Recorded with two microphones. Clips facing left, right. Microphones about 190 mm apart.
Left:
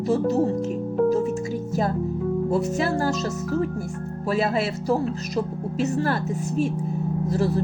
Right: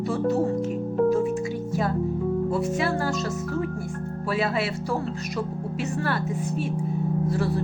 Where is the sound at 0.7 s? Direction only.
Centre (ahead or behind).